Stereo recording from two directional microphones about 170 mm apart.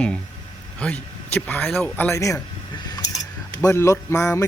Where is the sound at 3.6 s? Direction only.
20° left (ahead or behind).